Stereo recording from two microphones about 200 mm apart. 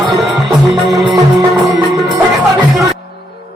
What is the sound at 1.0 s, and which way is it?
Music, 20° right (ahead or behind).